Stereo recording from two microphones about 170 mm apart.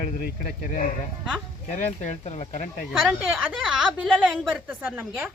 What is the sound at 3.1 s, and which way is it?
A woman's voice, 5° right (ahead or behind).